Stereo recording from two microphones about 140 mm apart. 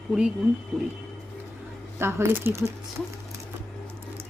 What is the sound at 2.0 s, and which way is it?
Speech, 20° right (ahead or behind).